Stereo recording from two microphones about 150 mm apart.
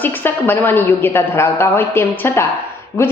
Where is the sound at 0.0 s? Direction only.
15° left (ahead or behind).